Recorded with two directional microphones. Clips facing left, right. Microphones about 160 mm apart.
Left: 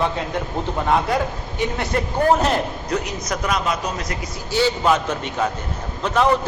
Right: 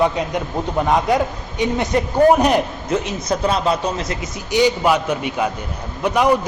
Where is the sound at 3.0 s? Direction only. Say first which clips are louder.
Right 5 dB; 30° right (ahead or behind).